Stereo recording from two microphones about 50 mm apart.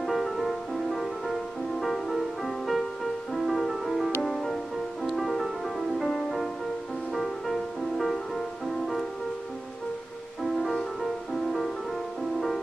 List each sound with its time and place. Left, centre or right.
0.0 s music: centre
10.4 s music: centre